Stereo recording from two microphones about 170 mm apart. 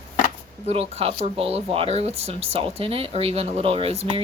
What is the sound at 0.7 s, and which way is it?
Speech, 35° right (ahead or behind).